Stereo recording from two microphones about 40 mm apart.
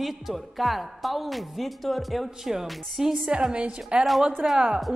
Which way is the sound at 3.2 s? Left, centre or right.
Right.